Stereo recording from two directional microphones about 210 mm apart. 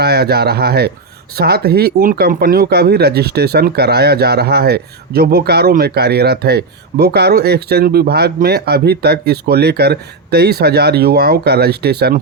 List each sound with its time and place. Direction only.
0.0 s speech: 50° right (ahead or behind)